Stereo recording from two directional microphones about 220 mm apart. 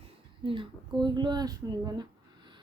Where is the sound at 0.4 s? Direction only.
20° right (ahead or behind).